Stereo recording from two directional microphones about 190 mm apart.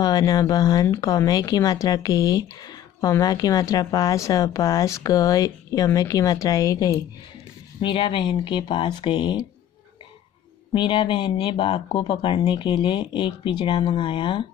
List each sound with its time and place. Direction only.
0.0 s speech: 20° left (ahead or behind)
7.8 s speech: 30° left (ahead or behind)
10.7 s speech: 25° left (ahead or behind)